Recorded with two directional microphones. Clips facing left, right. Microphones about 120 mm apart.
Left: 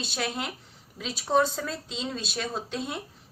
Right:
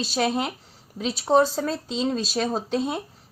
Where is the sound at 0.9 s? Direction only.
35° right (ahead or behind).